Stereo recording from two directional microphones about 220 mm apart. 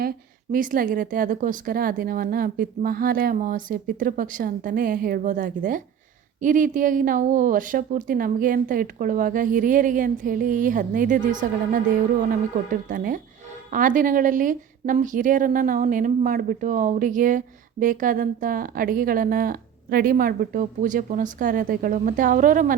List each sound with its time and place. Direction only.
0.5 s a woman's voice: 40° right (ahead or behind)